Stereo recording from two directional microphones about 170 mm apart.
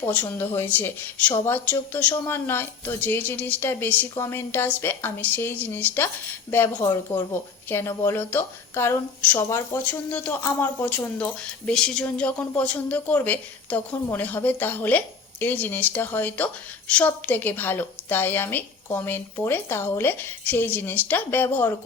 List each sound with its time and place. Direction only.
0.1 s speech: 10° left (ahead or behind)